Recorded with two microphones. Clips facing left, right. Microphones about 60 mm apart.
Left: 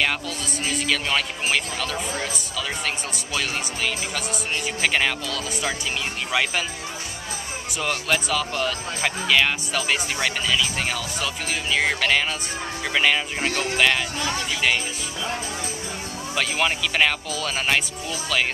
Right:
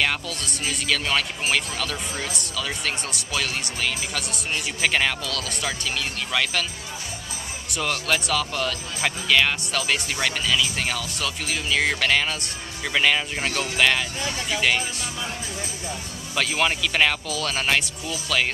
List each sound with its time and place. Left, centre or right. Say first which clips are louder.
0.7 s speech: even; centre
7.7 s speech: even; centre
16.3 s speech: right 1 dB; centre